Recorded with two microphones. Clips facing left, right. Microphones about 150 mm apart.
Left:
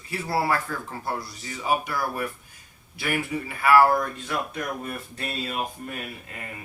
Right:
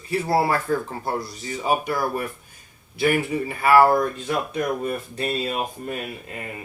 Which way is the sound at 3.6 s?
25° right (ahead or behind).